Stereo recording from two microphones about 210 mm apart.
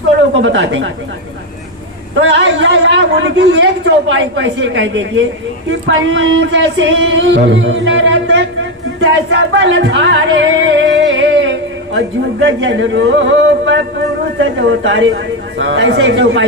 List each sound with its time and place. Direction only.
0.4 s a man's voice: 60° right (ahead or behind)
2.3 s a man's voice: 55° right (ahead or behind)